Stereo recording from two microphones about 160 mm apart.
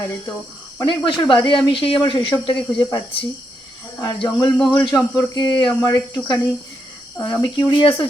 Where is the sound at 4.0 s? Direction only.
25° left (ahead or behind).